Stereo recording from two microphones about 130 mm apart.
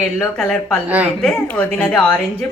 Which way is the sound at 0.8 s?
10° right (ahead or behind).